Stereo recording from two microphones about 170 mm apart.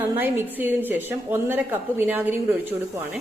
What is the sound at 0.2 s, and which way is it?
A woman's voice, 10° right (ahead or behind).